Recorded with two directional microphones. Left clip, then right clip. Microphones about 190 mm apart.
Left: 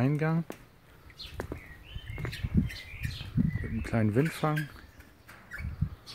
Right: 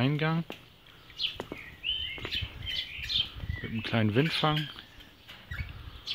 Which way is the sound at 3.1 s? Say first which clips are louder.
Right 16 dB; centre (ahead or behind).